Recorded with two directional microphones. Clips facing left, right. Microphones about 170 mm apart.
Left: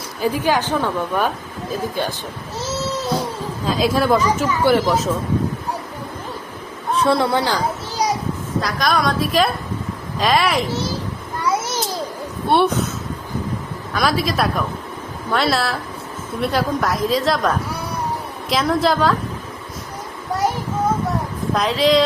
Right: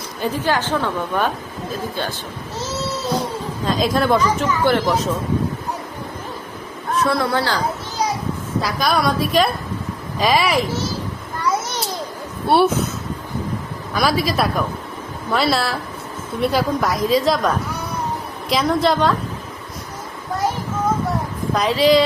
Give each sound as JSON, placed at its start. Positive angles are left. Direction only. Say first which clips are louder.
{"t": 0.2, "sound": "a woman's voice", "louder": "left 2 dB", "side_deg": 15}
{"t": 3.7, "sound": "speech", "louder": "left 1 dB", "side_deg": 5}
{"t": 6.9, "sound": "a child's voice", "louder": "left 2 dB", "side_deg": 30}
{"t": 8.6, "sound": "speech", "louder": "even", "side_deg": -5}
{"t": 11.4, "sound": "babbling", "louder": "left 1 dB", "side_deg": 5}
{"t": 12.5, "sound": "speech", "louder": "right 1 dB", "side_deg": -5}
{"t": 13.9, "sound": "speech", "louder": "right 1 dB", "side_deg": 0}
{"t": 21.5, "sound": "speech", "louder": "right 1 dB", "side_deg": 0}